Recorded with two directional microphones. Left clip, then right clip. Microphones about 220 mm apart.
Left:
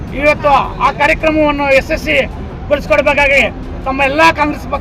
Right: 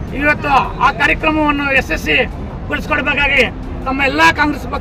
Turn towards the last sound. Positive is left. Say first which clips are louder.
# left 1 dB
turn(degrees=0)  # may be behind; listen again after turning